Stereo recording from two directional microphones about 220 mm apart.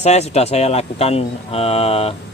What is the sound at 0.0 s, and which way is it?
Speech, 30° left (ahead or behind).